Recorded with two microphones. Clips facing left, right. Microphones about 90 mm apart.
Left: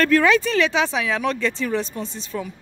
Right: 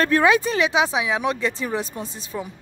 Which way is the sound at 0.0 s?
20° right (ahead or behind).